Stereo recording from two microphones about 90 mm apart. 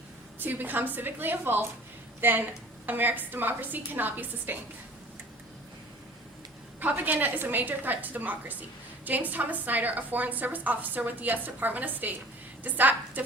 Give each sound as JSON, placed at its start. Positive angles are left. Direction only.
{"t": 0.3, "sound": "a woman's voice", "side_deg": -20}
{"t": 6.7, "sound": "a woman's voice", "side_deg": -20}